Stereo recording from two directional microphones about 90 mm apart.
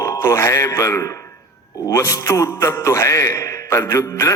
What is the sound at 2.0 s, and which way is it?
A man's voice, 35° left (ahead or behind).